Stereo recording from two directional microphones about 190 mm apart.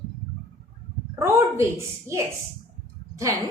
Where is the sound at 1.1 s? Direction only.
15° right (ahead or behind).